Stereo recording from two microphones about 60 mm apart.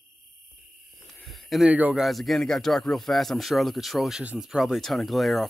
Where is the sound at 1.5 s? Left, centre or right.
Centre.